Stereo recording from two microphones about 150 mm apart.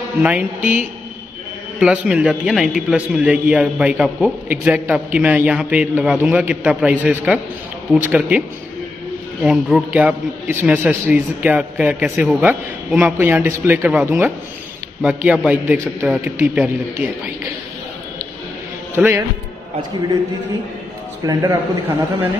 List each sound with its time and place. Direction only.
0.2 s a man's voice: 10° right (ahead or behind)
1.8 s a man's voice: 5° right (ahead or behind)
10.5 s a man's voice: 15° right (ahead or behind)
18.9 s a man's voice: 15° right (ahead or behind)
21.3 s a man's voice: 20° right (ahead or behind)